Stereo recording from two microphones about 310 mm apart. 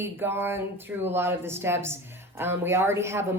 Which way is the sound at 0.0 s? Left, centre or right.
Centre.